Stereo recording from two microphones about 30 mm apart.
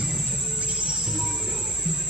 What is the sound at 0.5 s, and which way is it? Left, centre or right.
Music, right.